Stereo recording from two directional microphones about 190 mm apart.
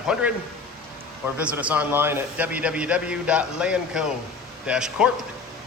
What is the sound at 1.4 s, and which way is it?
A man's voice, 10° right (ahead or behind).